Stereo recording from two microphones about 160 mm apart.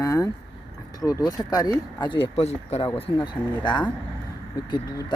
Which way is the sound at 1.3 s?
25° left (ahead or behind).